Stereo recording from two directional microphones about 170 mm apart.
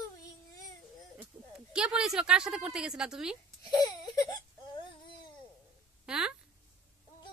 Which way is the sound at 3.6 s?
25° left (ahead or behind).